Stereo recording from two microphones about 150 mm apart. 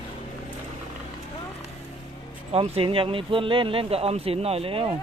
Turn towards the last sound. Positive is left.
turn(degrees=-40)  # may be behind; listen again after turning